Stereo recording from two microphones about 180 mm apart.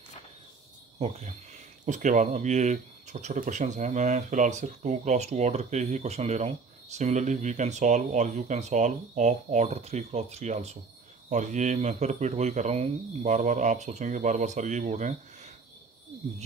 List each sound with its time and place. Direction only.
0.9 s speech: 40° right (ahead or behind)